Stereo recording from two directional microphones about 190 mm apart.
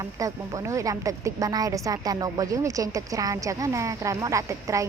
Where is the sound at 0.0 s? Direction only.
15° right (ahead or behind).